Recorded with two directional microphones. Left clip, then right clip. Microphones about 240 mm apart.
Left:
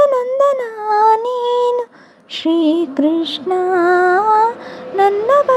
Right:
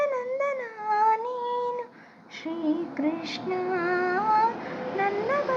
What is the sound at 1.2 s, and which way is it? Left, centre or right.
Child singing, left.